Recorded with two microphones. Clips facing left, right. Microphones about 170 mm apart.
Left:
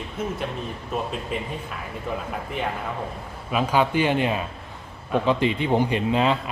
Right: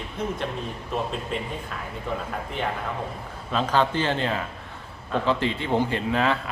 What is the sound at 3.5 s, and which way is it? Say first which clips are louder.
A man's voice: left 2 dB; 10° left (ahead or behind).